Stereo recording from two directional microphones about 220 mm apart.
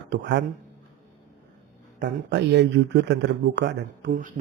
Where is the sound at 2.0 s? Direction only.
50° right (ahead or behind).